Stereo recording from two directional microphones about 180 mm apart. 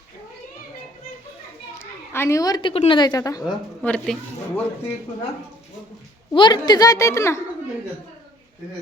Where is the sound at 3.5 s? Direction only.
5° left (ahead or behind).